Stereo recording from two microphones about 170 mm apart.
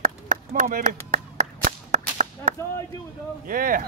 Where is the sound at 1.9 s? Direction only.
45° right (ahead or behind).